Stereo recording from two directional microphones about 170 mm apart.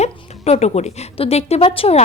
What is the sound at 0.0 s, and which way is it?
A woman's voice, 40° left (ahead or behind).